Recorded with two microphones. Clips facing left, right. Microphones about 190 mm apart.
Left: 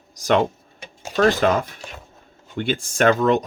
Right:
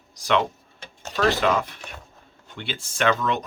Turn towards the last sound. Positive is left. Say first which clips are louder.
# left 6 dB
turn(degrees=45)  # may be behind; listen again after turning